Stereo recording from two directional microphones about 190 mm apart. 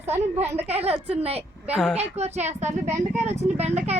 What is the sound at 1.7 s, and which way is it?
Speech, 5° right (ahead or behind).